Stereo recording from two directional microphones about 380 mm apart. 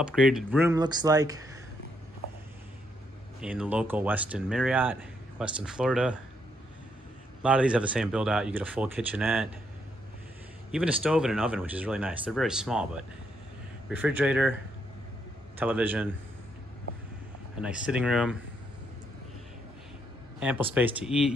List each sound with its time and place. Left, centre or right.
0.0 s speech: centre
3.3 s speech: centre
7.4 s speech: centre
10.7 s speech: centre
15.6 s speech: centre
17.6 s speech: centre
20.3 s speech: centre